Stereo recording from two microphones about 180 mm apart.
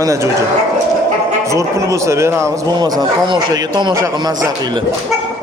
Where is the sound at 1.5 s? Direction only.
15° right (ahead or behind).